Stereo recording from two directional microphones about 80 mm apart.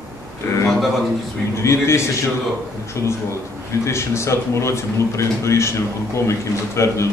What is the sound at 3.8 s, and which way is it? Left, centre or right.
Speech, left.